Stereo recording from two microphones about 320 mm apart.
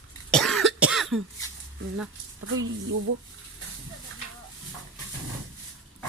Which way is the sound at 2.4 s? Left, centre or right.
Right.